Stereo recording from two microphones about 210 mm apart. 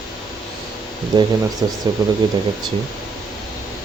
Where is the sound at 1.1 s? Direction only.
20° right (ahead or behind).